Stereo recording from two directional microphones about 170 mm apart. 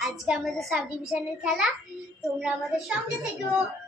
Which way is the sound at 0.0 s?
Centre (ahead or behind).